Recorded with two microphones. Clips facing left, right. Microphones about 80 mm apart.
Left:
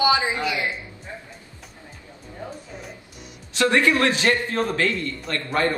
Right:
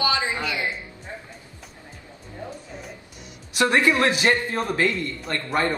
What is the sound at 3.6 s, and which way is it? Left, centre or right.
A man's voice, centre.